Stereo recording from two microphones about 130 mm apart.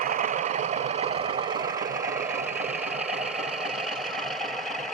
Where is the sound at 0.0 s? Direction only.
80° right; by 2.5 s 20° right (ahead or behind).